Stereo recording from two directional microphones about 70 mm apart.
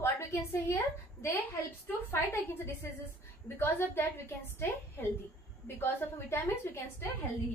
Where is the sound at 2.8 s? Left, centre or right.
Left.